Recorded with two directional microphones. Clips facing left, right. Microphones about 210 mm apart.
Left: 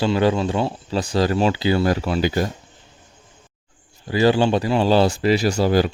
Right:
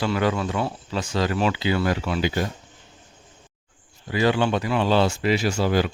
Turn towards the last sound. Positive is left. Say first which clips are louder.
# left 4 dB
turn(degrees=35)  # may be behind; listen again after turning